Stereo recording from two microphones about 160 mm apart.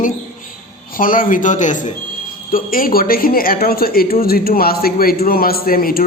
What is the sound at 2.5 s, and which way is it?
Speech, 60° left (ahead or behind).